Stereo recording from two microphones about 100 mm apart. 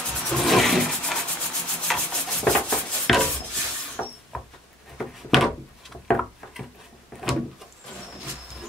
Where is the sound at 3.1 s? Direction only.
Centre (ahead or behind).